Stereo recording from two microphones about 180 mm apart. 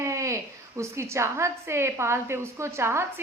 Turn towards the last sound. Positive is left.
turn(degrees=-15)  # may be behind; listen again after turning